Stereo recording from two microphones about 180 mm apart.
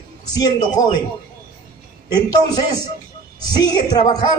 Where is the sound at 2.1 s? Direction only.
25° left (ahead or behind).